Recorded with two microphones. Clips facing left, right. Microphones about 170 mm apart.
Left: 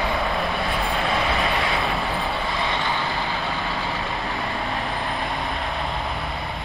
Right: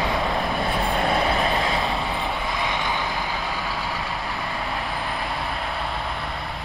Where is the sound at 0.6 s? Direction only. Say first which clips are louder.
Right 1 dB; 40° right (ahead or behind).